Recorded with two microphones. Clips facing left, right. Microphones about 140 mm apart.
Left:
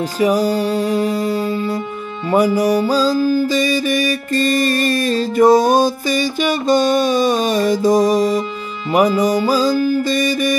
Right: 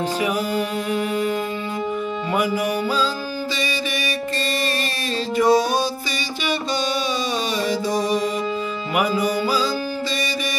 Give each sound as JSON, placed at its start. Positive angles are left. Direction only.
{"t": 0.2, "sound": "music", "side_deg": 35}